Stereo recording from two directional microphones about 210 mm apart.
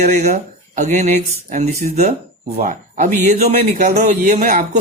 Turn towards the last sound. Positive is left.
turn(degrees=-40)  # may be behind; listen again after turning